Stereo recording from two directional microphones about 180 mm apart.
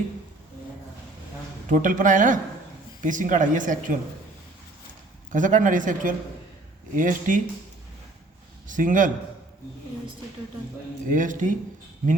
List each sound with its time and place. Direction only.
1.7 s speech: 45° right (ahead or behind)
5.3 s speech: 45° right (ahead or behind)
8.6 s speech: 45° right (ahead or behind)
11.1 s speech: 45° right (ahead or behind)